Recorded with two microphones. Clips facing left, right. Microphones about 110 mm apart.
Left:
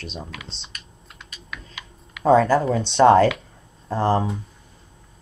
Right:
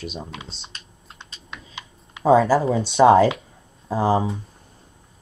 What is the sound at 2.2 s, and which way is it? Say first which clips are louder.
Speech: even; 5° right (ahead or behind).